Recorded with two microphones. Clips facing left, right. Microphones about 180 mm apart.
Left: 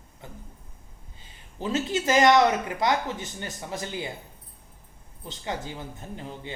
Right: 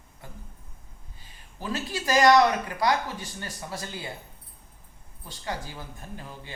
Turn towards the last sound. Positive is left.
turn(degrees=20)  # may be behind; listen again after turning